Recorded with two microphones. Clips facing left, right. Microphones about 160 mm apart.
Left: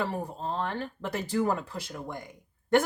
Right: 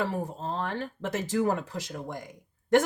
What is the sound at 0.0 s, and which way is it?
Speech, 45° right (ahead or behind).